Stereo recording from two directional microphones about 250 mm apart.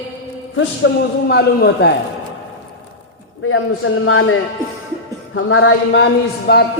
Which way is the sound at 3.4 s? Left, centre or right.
Left.